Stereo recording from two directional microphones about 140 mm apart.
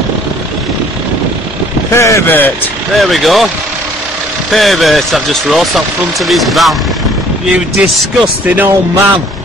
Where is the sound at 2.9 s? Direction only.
Centre (ahead or behind).